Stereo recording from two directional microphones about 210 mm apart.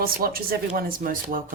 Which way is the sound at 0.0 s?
45° right (ahead or behind).